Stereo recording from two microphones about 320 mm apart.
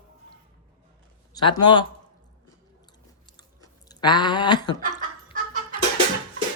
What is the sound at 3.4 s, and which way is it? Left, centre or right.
Chewing, centre.